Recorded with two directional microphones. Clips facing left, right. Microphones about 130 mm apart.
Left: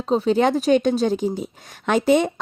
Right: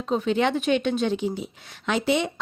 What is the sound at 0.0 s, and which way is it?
Speech, 35° left (ahead or behind).